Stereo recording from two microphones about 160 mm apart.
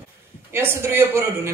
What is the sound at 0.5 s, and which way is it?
Speech, 15° right (ahead or behind).